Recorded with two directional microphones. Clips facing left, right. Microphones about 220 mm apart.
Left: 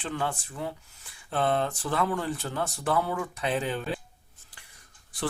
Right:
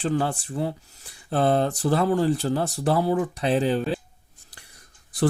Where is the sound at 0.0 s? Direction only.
35° right (ahead or behind).